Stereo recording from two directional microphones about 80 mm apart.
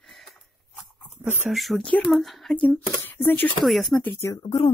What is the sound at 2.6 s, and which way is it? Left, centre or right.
Speech, left.